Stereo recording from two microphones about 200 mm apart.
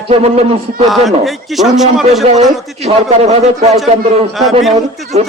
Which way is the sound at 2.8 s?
30° right (ahead or behind).